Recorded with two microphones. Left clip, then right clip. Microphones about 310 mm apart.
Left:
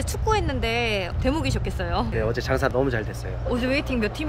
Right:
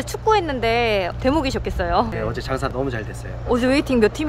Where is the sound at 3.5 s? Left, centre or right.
Centre.